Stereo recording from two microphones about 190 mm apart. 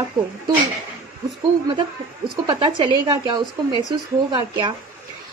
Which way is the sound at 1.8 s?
20° right (ahead or behind).